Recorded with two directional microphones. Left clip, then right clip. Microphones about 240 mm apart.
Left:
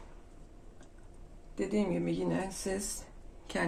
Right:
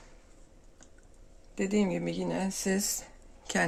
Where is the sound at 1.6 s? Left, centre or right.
Right.